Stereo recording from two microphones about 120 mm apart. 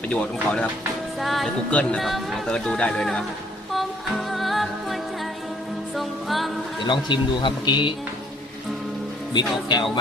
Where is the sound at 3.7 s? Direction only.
Centre (ahead or behind).